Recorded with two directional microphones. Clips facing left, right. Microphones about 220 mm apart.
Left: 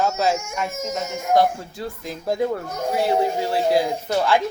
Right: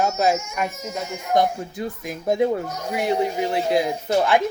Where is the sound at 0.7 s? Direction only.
45° left (ahead or behind).